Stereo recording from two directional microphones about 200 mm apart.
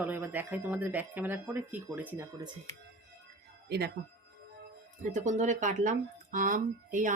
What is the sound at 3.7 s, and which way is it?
Speech, 55° right (ahead or behind).